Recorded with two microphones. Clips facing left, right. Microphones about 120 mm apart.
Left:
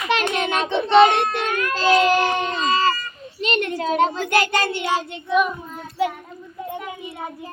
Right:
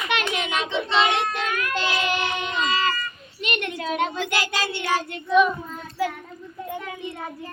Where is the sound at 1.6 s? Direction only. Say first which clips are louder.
Left 8 dB; 35° left (ahead or behind); by 4.8 s 50° left (ahead or behind).